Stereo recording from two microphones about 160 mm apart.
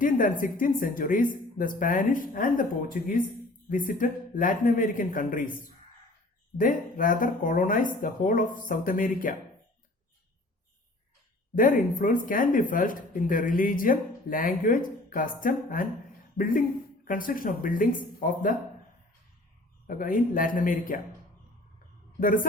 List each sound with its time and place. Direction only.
0.0 s speech: 60° left (ahead or behind)
11.5 s speech: 60° left (ahead or behind)
19.9 s speech: 55° left (ahead or behind)